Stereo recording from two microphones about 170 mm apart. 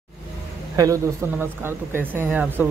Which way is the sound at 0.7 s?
20° right (ahead or behind).